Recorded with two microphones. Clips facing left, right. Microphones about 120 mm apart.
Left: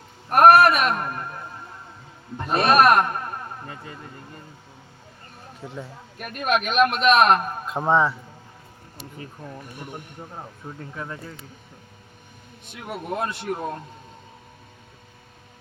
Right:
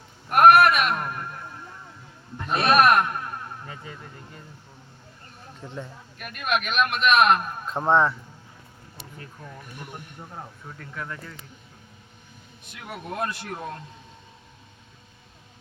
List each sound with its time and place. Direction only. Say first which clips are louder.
0.3 s a sound: left 2 dB; 35° left (ahead or behind)
2.5 s a man's voice: left 2 dB; 40° left (ahead or behind)
5.5 s speech: left 1 dB; 5° left (ahead or behind)
6.1 s a man's voice: left 3 dB; 40° left (ahead or behind)
7.7 s speech: even; centre (ahead or behind)
10.8 s speech: left 1 dB; 25° left (ahead or behind)
13.2 s speech: left 4 dB; 25° left (ahead or behind)